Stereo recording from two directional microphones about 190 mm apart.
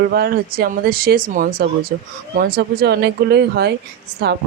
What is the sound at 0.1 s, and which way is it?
Speech, 55° right (ahead or behind).